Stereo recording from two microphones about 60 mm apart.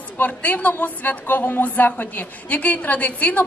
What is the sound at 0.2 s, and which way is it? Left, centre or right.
A woman's voice, left.